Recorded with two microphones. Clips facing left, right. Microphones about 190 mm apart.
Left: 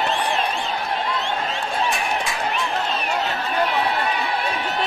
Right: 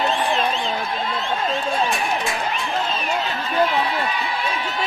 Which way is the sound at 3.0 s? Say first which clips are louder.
Even; 70° left (ahead or behind).